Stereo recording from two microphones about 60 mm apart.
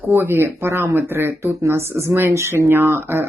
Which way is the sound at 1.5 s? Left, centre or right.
Right.